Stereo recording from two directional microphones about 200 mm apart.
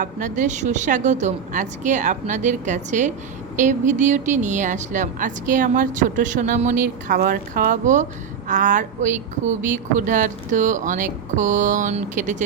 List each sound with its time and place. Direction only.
0.0 s speech: 40° right (ahead or behind)